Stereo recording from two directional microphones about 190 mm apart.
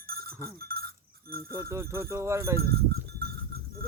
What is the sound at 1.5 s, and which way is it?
Speech, 15° right (ahead or behind).